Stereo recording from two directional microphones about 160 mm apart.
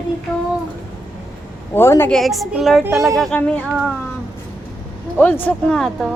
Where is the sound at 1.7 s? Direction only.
15° left (ahead or behind).